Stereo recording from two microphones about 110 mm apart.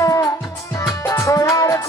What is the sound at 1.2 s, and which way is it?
Music, 30° left (ahead or behind).